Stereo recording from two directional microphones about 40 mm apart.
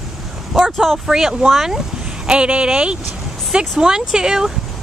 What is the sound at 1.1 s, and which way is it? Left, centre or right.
Speech, centre.